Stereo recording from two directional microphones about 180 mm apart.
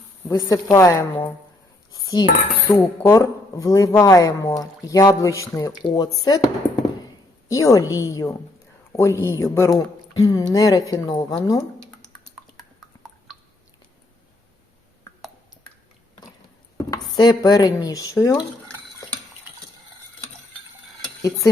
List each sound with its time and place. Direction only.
0.3 s speech: 20° left (ahead or behind)
1.9 s cutlery: 20° left (ahead or behind)
7.0 s a woman's voice: 15° left (ahead or behind)
9.2 s cutlery: 15° left (ahead or behind)
12.9 s a sound: 20° left (ahead or behind)
16.7 s speech: 20° left (ahead or behind)
21.2 s speech: 20° left (ahead or behind)